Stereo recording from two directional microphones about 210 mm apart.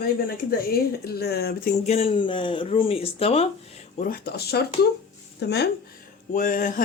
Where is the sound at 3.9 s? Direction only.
45° left (ahead or behind).